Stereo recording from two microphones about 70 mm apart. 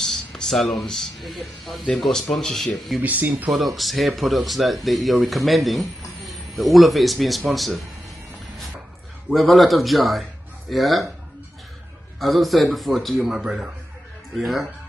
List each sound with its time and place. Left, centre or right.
0.0 s speech: centre
3.0 s speech: right
3.4 s speech: centre
9.3 s speech: centre
12.2 s speech: centre